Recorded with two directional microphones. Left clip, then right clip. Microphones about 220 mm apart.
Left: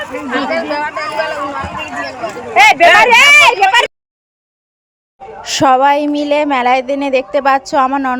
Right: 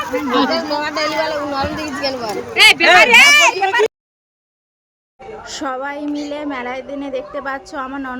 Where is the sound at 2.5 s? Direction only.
20° left (ahead or behind).